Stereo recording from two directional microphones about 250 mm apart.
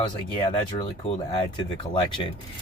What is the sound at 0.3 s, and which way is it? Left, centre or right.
Speech, left.